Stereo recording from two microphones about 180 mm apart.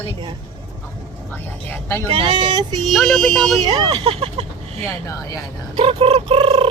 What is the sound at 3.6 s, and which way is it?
Speech, 25° right (ahead or behind).